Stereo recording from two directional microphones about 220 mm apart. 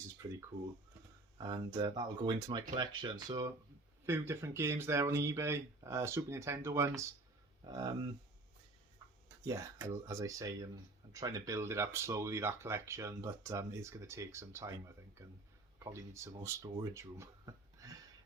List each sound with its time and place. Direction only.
0.2 s speech: 15° right (ahead or behind)
9.4 s speech: 15° right (ahead or behind)